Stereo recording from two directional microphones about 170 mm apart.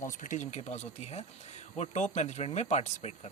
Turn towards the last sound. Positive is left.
turn(degrees=40)  # may be behind; listen again after turning